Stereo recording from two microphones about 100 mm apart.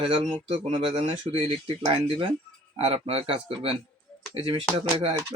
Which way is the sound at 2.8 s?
75° right (ahead or behind).